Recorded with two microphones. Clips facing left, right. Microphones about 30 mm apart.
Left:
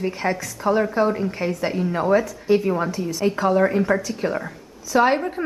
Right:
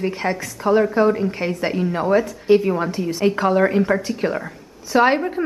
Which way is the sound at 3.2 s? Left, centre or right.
Right.